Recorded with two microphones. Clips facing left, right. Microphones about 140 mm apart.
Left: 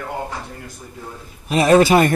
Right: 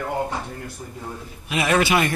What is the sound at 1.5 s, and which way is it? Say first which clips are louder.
Speech: left 7 dB; 35° left (ahead or behind).